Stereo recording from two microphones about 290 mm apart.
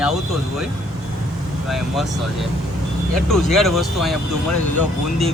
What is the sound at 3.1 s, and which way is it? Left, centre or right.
Speech, centre.